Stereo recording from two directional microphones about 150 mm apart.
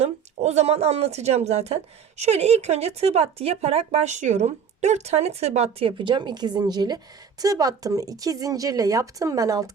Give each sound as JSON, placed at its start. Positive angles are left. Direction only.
{"t": 0.0, "sound": "speech", "side_deg": -45}